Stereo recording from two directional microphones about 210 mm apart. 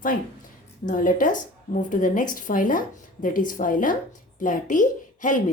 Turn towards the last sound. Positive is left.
turn(degrees=40)  # may be behind; listen again after turning